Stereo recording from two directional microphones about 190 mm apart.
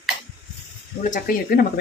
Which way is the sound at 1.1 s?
55° left (ahead or behind).